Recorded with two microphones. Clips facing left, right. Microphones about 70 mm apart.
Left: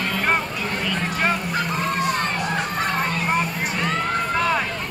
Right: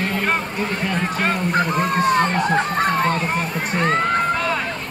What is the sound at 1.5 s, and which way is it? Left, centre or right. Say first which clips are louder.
Speech: right 4 dB; right.